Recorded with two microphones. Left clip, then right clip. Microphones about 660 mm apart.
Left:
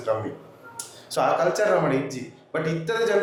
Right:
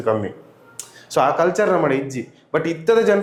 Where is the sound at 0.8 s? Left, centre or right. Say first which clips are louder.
Right 6 dB; right.